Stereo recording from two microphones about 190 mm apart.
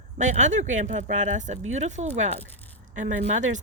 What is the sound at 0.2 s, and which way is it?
Speech, 40° right (ahead or behind).